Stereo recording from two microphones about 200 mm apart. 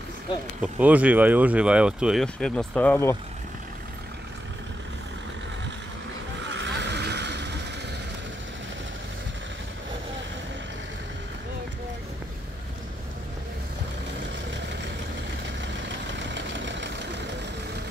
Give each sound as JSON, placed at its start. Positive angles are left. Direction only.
{"t": 0.6, "sound": "speech", "side_deg": -5}
{"t": 6.5, "sound": "vehicle", "side_deg": -60}
{"t": 16.2, "sound": "vehicle", "side_deg": -65}